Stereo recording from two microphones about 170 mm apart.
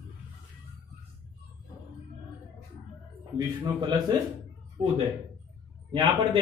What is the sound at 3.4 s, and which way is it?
Speech, 25° right (ahead or behind).